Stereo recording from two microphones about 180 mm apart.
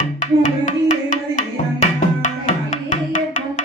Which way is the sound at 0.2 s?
45° left (ahead or behind).